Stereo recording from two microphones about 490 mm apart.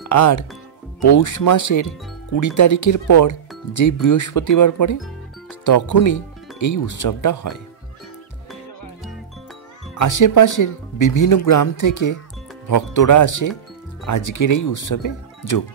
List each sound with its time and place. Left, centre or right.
0.1 s speech: left
9.9 s speech: left